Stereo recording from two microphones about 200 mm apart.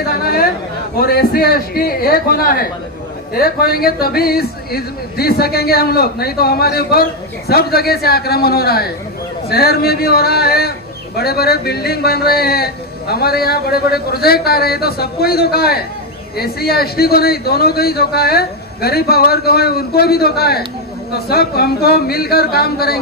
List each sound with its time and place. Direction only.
0.0 s speech: 50° left (ahead or behind)